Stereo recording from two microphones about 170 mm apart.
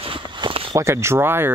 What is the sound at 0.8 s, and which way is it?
Speech, 15° right (ahead or behind).